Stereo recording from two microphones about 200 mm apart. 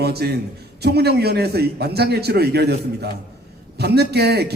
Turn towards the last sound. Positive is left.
turn(degrees=-55)  # may be behind; listen again after turning